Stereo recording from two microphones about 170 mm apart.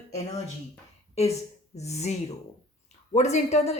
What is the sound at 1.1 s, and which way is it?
A woman's voice, 40° left (ahead or behind).